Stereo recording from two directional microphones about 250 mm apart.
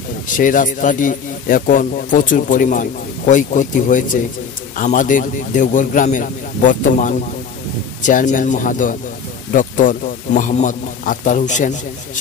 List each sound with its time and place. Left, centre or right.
0.3 s speech: left